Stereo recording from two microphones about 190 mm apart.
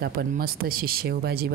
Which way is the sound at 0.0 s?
55° right (ahead or behind).